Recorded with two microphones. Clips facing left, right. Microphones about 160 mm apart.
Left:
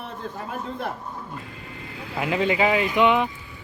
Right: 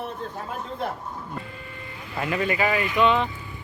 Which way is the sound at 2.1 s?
15° left (ahead or behind).